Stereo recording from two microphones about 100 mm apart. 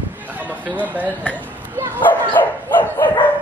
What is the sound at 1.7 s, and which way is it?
Bow-wow, 20° right (ahead or behind).